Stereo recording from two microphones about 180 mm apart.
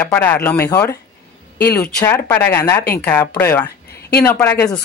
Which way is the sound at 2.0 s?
15° left (ahead or behind).